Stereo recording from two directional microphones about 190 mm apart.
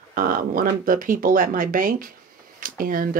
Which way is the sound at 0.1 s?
45° right (ahead or behind).